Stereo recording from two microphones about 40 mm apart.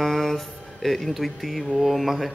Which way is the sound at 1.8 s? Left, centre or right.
Centre.